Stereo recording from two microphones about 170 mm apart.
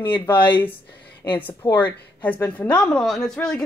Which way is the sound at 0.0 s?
10° left (ahead or behind).